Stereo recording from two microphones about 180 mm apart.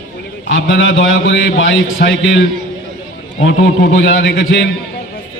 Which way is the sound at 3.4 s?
80° left.